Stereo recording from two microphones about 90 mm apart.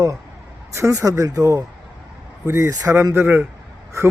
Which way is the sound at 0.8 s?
35° right (ahead or behind).